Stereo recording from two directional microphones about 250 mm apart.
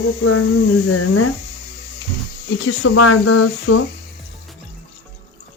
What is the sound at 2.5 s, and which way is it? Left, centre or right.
Speech, left.